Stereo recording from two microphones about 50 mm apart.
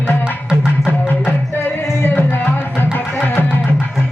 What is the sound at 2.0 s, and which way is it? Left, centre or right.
Music, left.